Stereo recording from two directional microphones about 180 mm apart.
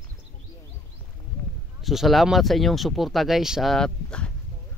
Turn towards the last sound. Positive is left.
turn(degrees=5)  # may be behind; listen again after turning